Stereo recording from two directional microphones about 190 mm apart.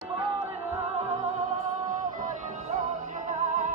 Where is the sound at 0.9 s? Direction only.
35° right (ahead or behind).